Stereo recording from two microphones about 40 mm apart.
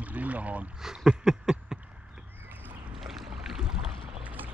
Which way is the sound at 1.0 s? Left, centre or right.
Centre.